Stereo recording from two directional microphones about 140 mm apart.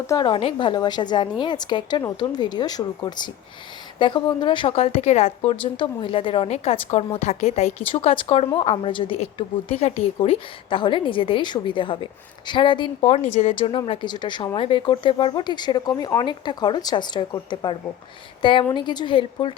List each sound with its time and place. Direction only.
0.1 s a woman's voice: 35° left (ahead or behind); by 5.5 s 50° left (ahead or behind)
5.7 s a woman's voice: 35° left (ahead or behind); by 7.7 s 55° left (ahead or behind)
7.9 s a woman's voice: 40° left (ahead or behind)